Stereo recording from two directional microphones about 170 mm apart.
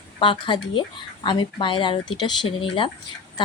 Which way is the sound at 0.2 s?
30° left (ahead or behind).